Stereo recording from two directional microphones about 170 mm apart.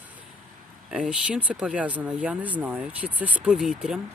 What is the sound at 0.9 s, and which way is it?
Speech, 5° right (ahead or behind).